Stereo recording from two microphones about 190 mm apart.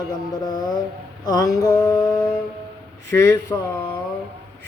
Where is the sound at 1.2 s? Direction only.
20° left (ahead or behind).